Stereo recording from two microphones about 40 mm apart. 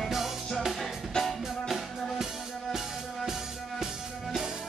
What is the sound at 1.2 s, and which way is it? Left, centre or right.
Music, centre.